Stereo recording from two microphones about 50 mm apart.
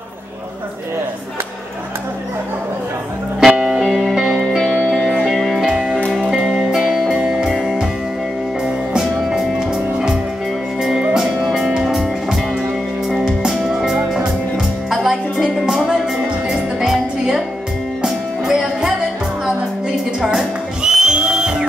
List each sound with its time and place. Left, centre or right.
3.3 s music: centre
3.8 s music: centre
5.7 s music: centre
6.3 s music: centre
11.1 s music: centre
20.2 s music: centre